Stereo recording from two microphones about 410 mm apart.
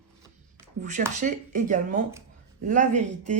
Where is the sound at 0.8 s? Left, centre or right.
Centre.